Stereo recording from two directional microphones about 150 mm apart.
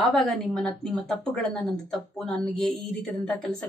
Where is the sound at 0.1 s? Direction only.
5° left (ahead or behind).